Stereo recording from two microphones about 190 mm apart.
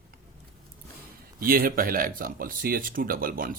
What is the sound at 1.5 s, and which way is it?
Speech, 50° right (ahead or behind).